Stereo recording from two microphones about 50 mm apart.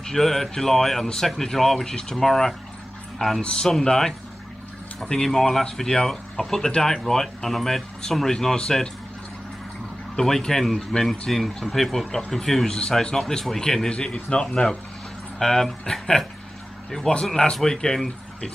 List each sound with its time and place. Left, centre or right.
0.0 s speech: centre
10.1 s speech: centre